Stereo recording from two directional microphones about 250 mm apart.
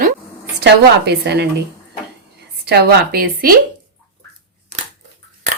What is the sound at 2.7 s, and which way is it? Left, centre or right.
Speech, right.